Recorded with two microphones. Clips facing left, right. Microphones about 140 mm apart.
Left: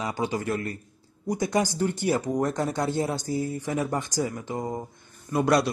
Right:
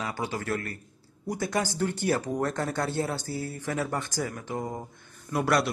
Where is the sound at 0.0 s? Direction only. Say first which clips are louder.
Left 4 dB; 15° left (ahead or behind).